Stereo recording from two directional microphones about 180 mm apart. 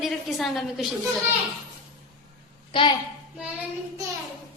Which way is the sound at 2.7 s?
30° left (ahead or behind).